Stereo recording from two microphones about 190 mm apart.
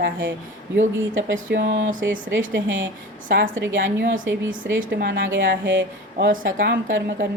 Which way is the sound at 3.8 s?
65° right (ahead or behind).